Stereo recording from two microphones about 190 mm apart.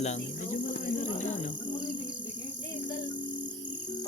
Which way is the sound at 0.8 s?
40° left (ahead or behind).